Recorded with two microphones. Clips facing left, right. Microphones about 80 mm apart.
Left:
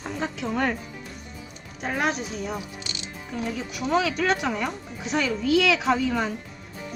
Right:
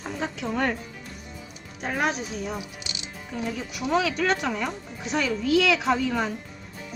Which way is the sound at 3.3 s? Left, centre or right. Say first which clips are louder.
Left 1 dB; centre.